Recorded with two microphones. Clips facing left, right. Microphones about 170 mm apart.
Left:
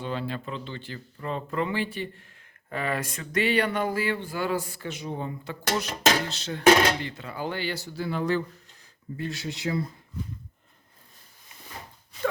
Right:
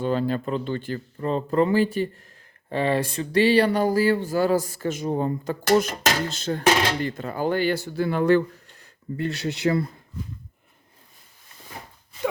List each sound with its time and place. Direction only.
0.0 s speech: 45° right (ahead or behind)
2.6 s speech: 30° right (ahead or behind); by 9.9 s 65° right (ahead or behind)